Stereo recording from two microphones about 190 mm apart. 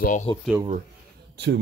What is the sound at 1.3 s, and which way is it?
Speech, 65° right (ahead or behind).